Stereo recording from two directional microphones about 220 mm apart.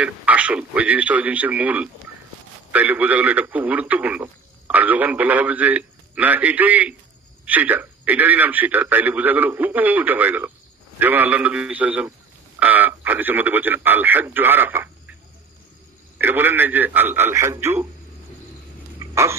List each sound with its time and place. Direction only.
0.0 s a man's voice: 5° right (ahead or behind)
16.2 s a man's voice: 10° right (ahead or behind)
18.9 s a sound: 15° right (ahead or behind)